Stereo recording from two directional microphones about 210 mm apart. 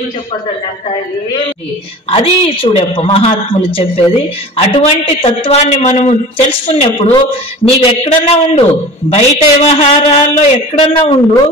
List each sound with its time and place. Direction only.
2.0 s a woman's voice: 30° left (ahead or behind)